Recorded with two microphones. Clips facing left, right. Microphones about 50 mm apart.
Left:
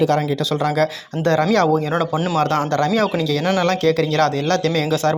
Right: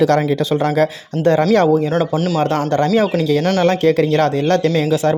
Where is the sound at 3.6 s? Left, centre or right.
Right.